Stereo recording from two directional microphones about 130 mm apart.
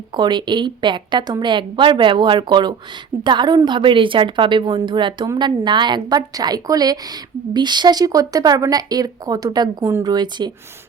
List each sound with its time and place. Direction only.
0.2 s a woman's voice: 35° right (ahead or behind)
9.8 s a woman's voice: 20° right (ahead or behind)
10.1 s a woman's voice: 35° right (ahead or behind)